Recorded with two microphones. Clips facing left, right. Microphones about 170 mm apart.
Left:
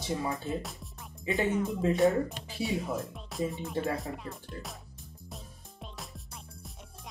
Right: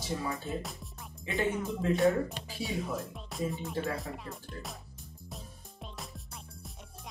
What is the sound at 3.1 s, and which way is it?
Speech, centre (ahead or behind).